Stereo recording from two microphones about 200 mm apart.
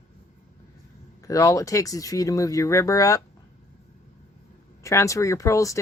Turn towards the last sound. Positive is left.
turn(degrees=15)  # may be behind; listen again after turning